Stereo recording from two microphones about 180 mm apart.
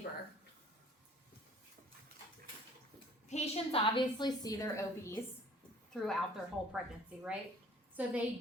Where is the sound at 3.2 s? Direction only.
40° left (ahead or behind); by 5.2 s 15° left (ahead or behind).